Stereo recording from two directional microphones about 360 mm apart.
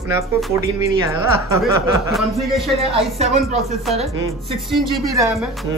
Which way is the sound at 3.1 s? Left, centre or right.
Centre.